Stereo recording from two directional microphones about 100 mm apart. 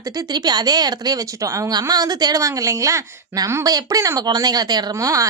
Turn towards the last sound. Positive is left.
turn(degrees=-35)  # may be behind; listen again after turning